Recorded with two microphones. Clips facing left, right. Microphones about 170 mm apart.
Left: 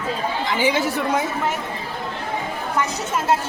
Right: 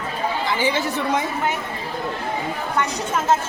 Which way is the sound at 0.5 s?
15° left (ahead or behind).